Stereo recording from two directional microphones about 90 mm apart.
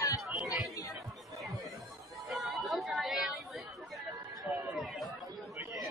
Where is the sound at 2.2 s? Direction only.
Centre (ahead or behind).